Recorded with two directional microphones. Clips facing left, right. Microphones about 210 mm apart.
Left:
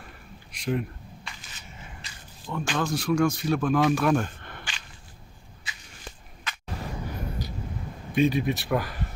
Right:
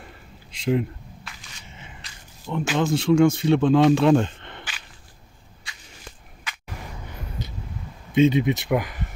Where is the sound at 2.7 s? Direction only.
25° right (ahead or behind).